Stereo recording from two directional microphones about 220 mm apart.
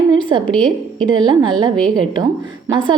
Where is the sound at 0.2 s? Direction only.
20° right (ahead or behind).